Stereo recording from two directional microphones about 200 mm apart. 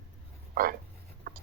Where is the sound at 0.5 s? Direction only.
50° right (ahead or behind).